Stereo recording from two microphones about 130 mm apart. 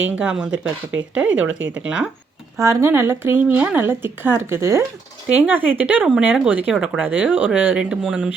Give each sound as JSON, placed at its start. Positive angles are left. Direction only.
{"t": 0.2, "sound": "a woman's voice", "side_deg": -5}
{"t": 2.6, "sound": "a woman's voice", "side_deg": -20}
{"t": 7.0, "sound": "a woman's voice", "side_deg": -15}